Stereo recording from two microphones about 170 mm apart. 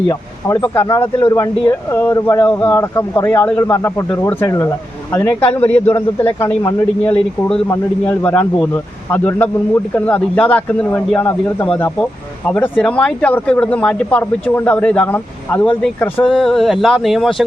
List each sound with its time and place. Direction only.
0.1 s speech: 20° left (ahead or behind)
16.2 s speech: centre (ahead or behind)